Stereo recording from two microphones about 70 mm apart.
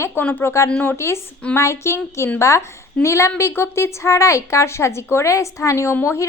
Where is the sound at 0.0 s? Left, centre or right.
Left.